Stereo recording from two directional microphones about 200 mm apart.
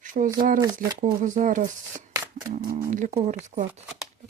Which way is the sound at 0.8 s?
45° right (ahead or behind).